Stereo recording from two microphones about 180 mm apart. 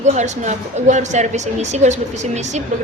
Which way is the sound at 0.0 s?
40° right (ahead or behind).